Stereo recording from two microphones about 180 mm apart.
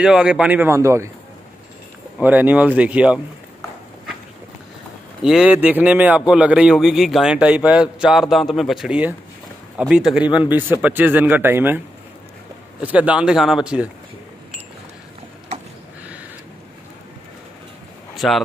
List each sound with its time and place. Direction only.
0.0 s speech: 5° right (ahead or behind)
2.1 s speech: 10° right (ahead or behind)
5.2 s a man's voice: 5° right (ahead or behind)
12.8 s a man's voice: 10° right (ahead or behind)
18.1 s a sound: centre (ahead or behind)